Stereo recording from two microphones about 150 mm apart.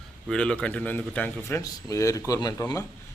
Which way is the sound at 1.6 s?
20° left (ahead or behind).